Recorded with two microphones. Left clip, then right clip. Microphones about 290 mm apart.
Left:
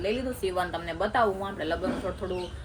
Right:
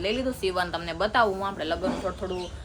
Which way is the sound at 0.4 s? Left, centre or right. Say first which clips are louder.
Even; centre.